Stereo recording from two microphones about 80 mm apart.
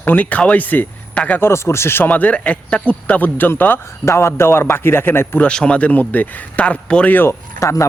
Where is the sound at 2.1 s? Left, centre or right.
Centre.